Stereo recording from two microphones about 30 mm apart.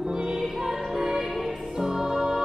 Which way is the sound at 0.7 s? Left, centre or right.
Centre.